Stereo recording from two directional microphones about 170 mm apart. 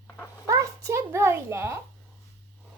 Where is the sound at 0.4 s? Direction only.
20° right (ahead or behind).